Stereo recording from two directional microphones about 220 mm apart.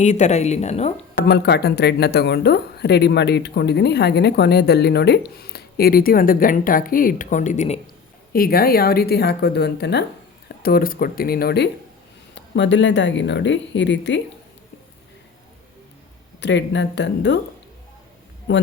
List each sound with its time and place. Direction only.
0.0 s speech: 30° left (ahead or behind)
1.3 s speech: 50° left (ahead or behind)
16.4 s speech: 55° left (ahead or behind)
18.5 s speech: 55° left (ahead or behind)